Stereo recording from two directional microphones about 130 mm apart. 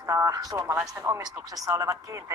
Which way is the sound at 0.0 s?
25° right (ahead or behind).